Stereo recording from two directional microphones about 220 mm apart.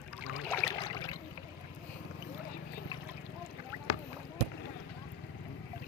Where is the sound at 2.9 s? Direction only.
20° left (ahead or behind).